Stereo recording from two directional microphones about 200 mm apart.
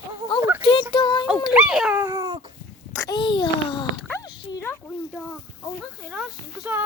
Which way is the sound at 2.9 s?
15° left (ahead or behind).